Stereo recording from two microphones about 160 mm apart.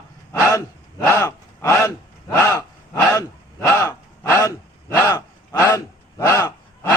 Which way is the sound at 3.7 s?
20° left (ahead or behind).